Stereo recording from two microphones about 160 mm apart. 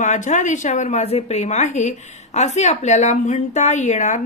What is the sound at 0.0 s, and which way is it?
A woman's voice, 50° left (ahead or behind).